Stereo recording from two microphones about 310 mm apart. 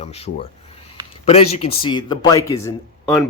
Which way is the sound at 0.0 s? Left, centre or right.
Centre.